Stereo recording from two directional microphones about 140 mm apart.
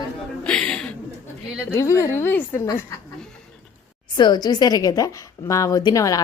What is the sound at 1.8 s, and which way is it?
Speech, 20° left (ahead or behind).